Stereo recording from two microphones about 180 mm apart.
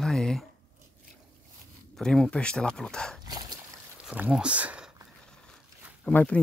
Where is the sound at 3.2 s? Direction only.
20° right (ahead or behind).